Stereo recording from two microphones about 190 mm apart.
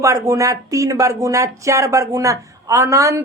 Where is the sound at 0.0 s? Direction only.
15° right (ahead or behind).